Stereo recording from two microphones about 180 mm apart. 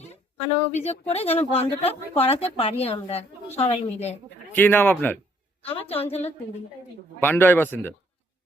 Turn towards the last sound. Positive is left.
turn(degrees=10)  # may be behind; listen again after turning